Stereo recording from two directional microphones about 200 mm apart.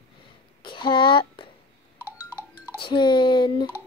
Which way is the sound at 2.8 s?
25° left (ahead or behind).